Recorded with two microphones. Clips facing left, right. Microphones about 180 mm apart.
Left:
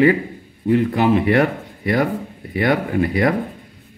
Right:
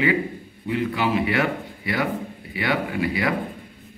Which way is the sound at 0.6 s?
45° left (ahead or behind).